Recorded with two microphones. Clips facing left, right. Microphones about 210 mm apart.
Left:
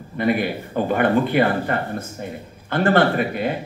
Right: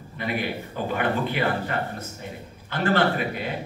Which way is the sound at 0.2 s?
50° left (ahead or behind).